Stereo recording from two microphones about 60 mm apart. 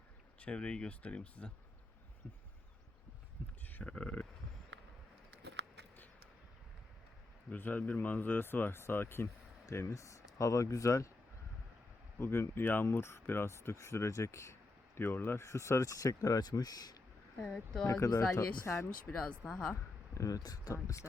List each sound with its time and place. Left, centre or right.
0.3 s speech: centre
3.7 s a sound: left
3.9 s speech: left
7.5 s speech: left
9.8 s speech: left
12.2 s speech: left
14.9 s speech: left
17.8 s speech: left
19.1 s speech: left
19.5 s speech: centre
20.1 s speech: left
20.8 s speech: left